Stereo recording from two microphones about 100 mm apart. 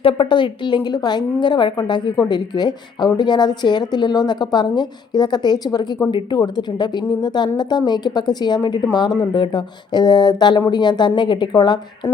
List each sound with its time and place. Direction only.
0.0 s a woman's voice: 60° left (ahead or behind)